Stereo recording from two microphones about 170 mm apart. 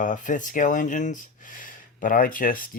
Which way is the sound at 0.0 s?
50° left (ahead or behind).